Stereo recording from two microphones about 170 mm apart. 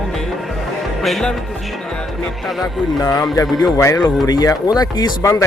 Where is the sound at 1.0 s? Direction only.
Centre (ahead or behind).